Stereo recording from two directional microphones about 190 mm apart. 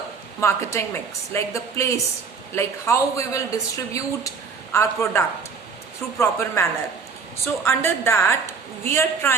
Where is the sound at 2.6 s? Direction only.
15° left (ahead or behind).